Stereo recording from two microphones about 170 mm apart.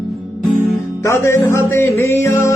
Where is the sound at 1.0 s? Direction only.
15° left (ahead or behind).